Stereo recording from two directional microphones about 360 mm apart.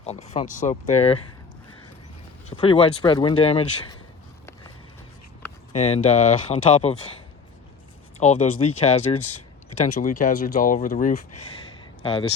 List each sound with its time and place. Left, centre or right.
0.0 s speech: centre
2.5 s speech: centre
5.7 s speech: centre
8.2 s speech: centre